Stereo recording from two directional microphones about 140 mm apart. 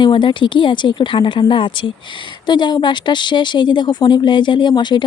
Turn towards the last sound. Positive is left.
turn(degrees=30)  # may be behind; listen again after turning